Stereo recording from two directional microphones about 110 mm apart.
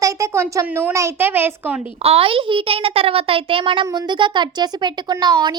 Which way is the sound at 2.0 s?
60° right (ahead or behind).